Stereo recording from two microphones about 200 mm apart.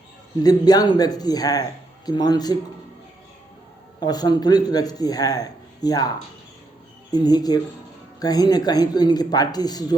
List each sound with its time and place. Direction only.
0.4 s a man's voice: 20° left (ahead or behind)
4.0 s a man's voice: 20° left (ahead or behind)